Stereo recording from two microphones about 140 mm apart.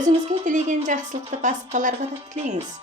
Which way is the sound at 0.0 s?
60° right (ahead or behind).